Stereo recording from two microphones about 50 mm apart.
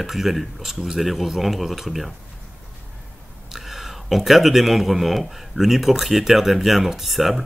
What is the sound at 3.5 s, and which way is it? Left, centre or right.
Speech, centre.